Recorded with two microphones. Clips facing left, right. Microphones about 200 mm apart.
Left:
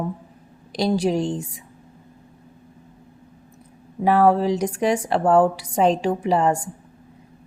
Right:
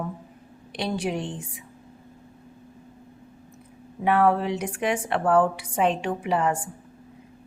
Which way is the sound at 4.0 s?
35° left (ahead or behind).